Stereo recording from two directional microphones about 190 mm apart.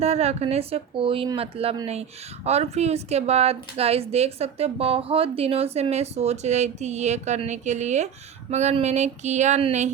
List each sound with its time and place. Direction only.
0.0 s a woman's voice: 35° right (ahead or behind)